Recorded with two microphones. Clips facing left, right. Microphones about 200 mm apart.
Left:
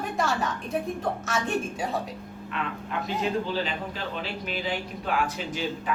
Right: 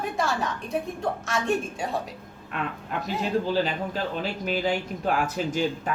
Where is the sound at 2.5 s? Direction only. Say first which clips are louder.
Right 1 dB; 45° right (ahead or behind).